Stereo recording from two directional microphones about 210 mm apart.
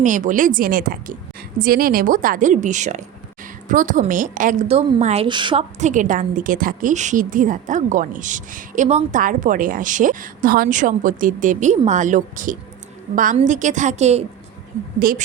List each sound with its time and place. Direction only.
0.0 s a woman's voice: 35° right (ahead or behind); by 5.6 s 20° right (ahead or behind)
5.8 s a woman's voice: 35° right (ahead or behind)
14.9 s speech: 40° right (ahead or behind)